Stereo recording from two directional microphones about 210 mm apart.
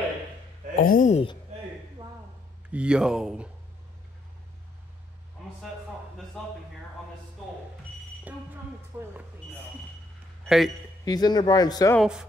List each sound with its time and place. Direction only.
0.7 s speech: 40° left (ahead or behind)
2.7 s speech: 5° right (ahead or behind)
8.9 s speech: 10° right (ahead or behind)
10.4 s a man's voice: centre (ahead or behind)
11.1 s speech: 20° left (ahead or behind)
12.0 s speech: 5° right (ahead or behind)